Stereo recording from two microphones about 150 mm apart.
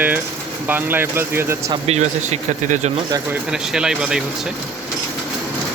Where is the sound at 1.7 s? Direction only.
45° right (ahead or behind).